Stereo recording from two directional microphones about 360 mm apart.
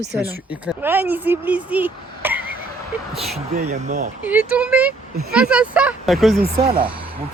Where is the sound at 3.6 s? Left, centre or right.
Centre.